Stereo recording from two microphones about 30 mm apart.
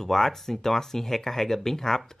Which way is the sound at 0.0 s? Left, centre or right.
Centre.